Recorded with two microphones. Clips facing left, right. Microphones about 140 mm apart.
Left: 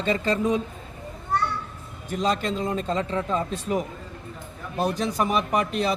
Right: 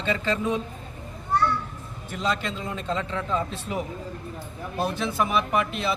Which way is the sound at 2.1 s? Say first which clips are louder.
Left 3 dB; 40° left (ahead or behind).